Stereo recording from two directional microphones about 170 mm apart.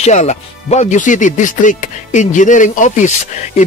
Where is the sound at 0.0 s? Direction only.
45° left (ahead or behind).